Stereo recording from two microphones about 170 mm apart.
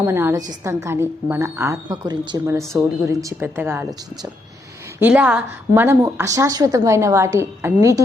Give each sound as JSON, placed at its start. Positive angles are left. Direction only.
{"t": 0.0, "sound": "a woman's voice", "side_deg": -15}
{"t": 4.9, "sound": "a woman's voice", "side_deg": -10}